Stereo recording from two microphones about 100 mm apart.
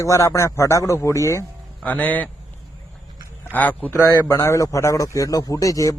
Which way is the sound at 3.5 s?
15° left (ahead or behind).